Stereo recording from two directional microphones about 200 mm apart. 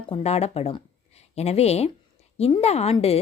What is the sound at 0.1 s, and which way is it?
A woman's voice, 30° left (ahead or behind).